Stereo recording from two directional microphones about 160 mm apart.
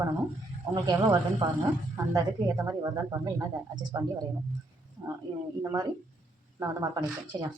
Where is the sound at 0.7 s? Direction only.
25° right (ahead or behind).